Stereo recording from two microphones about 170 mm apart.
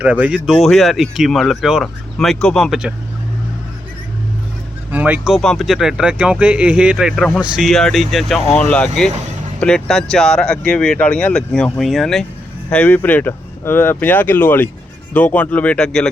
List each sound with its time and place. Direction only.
0.0 s speech: 10° right (ahead or behind)
4.9 s speech: 10° right (ahead or behind)